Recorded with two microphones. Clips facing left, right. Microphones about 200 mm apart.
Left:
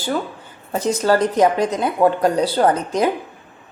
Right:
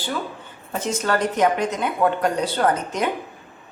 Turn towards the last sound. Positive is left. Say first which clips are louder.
# left 4 dB
turn(degrees=35)  # may be behind; listen again after turning